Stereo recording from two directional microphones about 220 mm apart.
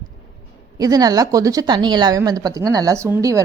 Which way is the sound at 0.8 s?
15° right (ahead or behind).